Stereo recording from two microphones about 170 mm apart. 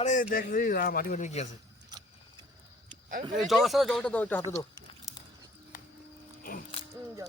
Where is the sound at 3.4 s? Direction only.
Centre (ahead or behind).